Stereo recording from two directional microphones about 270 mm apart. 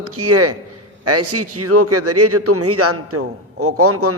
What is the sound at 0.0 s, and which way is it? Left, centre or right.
A man's voice, right.